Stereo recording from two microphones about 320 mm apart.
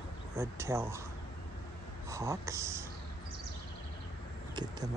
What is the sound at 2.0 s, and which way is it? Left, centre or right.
Speech, centre.